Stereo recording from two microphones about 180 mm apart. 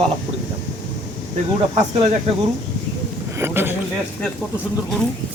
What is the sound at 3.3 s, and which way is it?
Speech, 15° right (ahead or behind).